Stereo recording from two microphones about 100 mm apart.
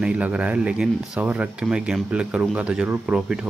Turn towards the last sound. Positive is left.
turn(degrees=-10)  # may be behind; listen again after turning